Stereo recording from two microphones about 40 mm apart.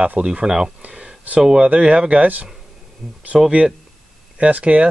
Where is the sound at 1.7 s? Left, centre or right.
Right.